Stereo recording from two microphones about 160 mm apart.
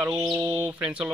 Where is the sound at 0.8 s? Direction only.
5° right (ahead or behind).